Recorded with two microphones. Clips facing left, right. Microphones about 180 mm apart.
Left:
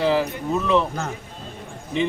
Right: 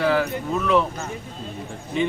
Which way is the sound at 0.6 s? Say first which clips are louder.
Even; 20° left (ahead or behind).